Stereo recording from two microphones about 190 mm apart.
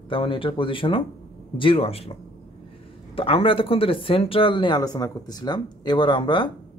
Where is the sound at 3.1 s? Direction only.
30° left (ahead or behind).